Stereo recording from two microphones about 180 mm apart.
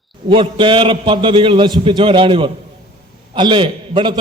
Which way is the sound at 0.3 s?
30° right (ahead or behind).